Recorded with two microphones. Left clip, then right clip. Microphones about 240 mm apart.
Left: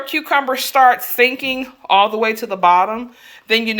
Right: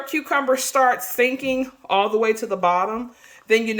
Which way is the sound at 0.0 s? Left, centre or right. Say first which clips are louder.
Left 5 dB; centre.